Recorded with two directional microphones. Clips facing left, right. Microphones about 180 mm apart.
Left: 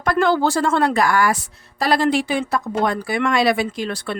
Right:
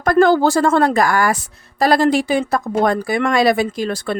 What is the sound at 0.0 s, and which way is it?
Speech, 45° right (ahead or behind).